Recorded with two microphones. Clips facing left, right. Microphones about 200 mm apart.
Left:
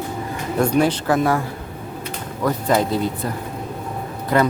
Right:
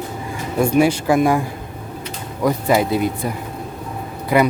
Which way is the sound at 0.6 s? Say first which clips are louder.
Right 3 dB; 10° right (ahead or behind).